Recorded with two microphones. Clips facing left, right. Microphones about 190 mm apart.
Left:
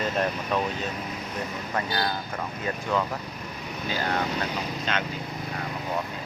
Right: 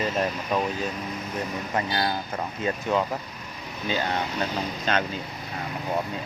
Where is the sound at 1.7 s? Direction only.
25° right (ahead or behind).